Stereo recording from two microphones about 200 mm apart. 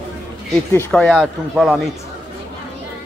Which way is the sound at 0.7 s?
10° left (ahead or behind).